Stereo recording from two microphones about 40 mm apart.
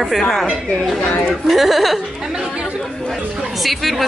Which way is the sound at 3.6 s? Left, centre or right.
Centre.